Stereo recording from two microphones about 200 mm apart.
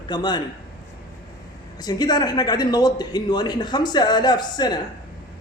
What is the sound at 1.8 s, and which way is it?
A man's voice, 20° left (ahead or behind).